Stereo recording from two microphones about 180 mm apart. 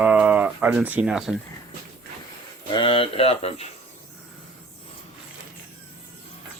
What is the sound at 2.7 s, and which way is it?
Speech, 30° left (ahead or behind).